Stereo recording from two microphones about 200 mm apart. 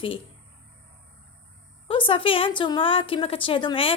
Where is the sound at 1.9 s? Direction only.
25° left (ahead or behind).